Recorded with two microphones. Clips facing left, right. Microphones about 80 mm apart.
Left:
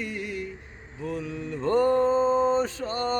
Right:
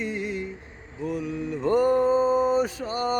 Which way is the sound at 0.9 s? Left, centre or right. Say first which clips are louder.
Right 3 dB; centre.